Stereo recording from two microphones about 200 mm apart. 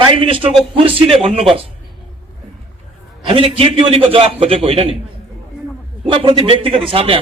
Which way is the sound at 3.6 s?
25° right (ahead or behind).